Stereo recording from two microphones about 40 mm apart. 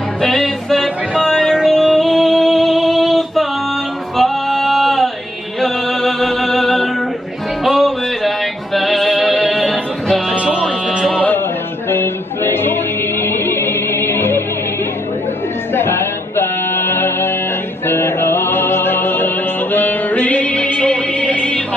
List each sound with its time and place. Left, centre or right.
0.2 s music: centre
1.2 s music: left
1.6 s music: centre
10.3 s music: right
11.9 s music: left
15.7 s music: left